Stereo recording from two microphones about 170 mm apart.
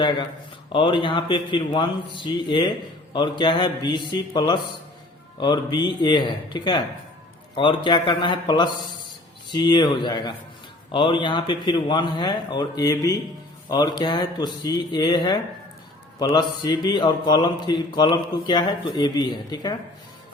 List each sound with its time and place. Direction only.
0.7 s speech: 30° left (ahead or behind)